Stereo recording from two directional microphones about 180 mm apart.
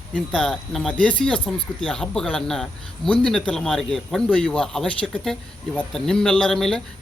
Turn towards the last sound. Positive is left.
turn(degrees=5)  # may be behind; listen again after turning